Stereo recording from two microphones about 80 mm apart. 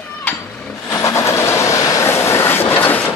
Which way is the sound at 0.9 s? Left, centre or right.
Left.